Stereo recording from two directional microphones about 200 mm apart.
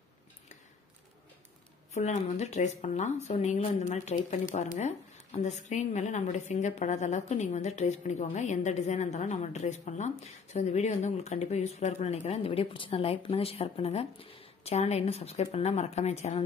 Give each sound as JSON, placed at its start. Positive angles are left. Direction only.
{"t": 2.0, "sound": "speech", "side_deg": 35}